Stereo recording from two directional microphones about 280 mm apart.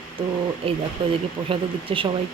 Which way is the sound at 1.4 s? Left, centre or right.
Centre.